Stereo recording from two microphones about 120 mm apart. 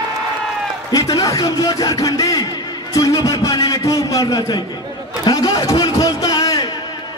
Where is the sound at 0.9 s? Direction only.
30° left (ahead or behind).